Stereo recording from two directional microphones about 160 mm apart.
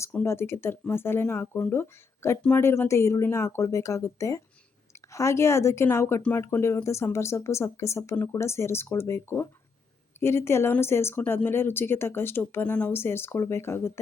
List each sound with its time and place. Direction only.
0.0 s speech: 15° left (ahead or behind)